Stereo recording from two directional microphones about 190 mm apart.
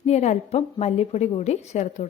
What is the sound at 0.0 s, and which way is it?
A woman's voice, 35° left (ahead or behind).